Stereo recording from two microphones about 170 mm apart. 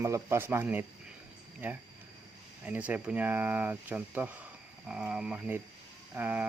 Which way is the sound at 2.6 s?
10° right (ahead or behind).